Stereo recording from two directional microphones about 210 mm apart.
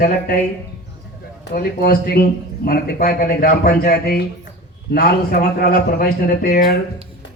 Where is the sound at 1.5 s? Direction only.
45° left (ahead or behind).